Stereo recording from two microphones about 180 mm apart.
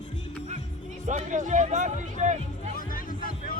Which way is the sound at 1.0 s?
40° right (ahead or behind).